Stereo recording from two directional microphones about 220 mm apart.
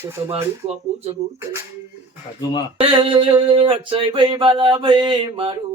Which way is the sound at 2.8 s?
25° right (ahead or behind).